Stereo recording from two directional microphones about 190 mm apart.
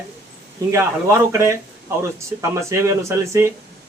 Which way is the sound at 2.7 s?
15° right (ahead or behind).